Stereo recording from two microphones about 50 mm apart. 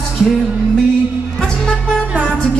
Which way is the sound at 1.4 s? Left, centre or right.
Centre.